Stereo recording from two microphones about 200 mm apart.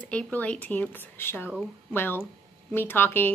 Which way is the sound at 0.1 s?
5° left (ahead or behind).